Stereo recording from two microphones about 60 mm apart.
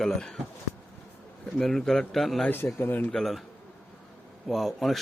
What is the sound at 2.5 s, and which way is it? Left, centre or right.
Speech, left.